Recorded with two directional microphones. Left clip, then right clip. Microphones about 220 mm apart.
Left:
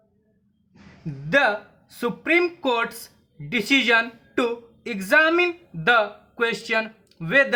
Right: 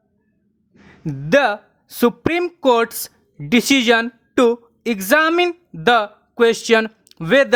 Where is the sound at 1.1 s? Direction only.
35° right (ahead or behind).